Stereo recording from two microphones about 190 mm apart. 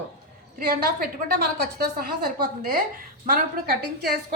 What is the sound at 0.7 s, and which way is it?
A woman's voice, 55° right (ahead or behind).